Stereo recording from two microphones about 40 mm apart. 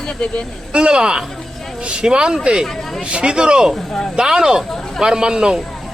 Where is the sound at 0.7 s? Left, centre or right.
Right.